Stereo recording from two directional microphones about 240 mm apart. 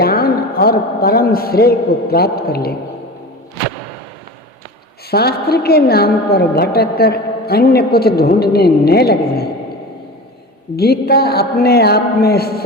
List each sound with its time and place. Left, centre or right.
0.0 s a woman's voice: left
5.1 s a woman's voice: left
10.8 s a woman's voice: left